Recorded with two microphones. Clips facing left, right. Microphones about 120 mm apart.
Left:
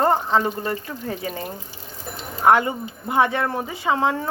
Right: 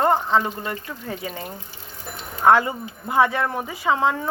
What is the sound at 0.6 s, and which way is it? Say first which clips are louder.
Speech: left 3 dB; 35° left (ahead or behind).